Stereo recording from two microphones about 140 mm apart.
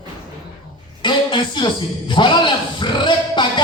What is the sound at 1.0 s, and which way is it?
Speech, 35° left (ahead or behind).